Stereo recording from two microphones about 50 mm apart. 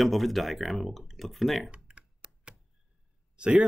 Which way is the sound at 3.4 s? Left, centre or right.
Right.